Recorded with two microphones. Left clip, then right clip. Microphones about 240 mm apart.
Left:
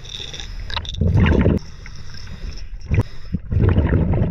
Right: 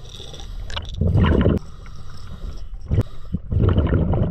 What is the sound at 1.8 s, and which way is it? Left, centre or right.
Boat, left.